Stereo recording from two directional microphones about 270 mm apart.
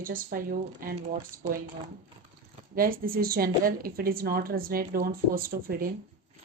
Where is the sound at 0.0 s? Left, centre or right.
Right.